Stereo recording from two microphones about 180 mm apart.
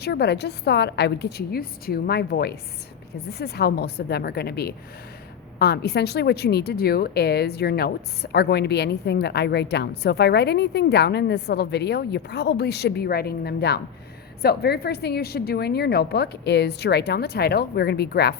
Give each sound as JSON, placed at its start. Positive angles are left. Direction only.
{"t": 0.0, "sound": "a woman's voice", "side_deg": 65}